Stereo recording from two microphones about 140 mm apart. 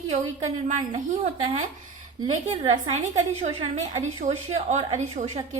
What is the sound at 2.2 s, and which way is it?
A woman's voice, 40° right (ahead or behind).